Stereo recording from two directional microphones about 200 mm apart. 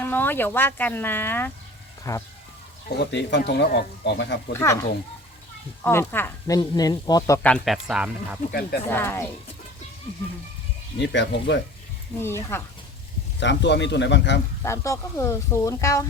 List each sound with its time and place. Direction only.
0.0 s speech: 10° left (ahead or behind)
3.0 s speech: 60° left (ahead or behind)
4.5 s speech: 15° left (ahead or behind)
5.8 s speech: 10° left (ahead or behind)
7.4 s speech: 5° left (ahead or behind)
8.9 s speech: 10° left (ahead or behind)
10.9 s speech: 60° left (ahead or behind)
12.2 s speech: 10° left (ahead or behind)
13.4 s speech: 60° left (ahead or behind)
14.6 s speech: 15° left (ahead or behind)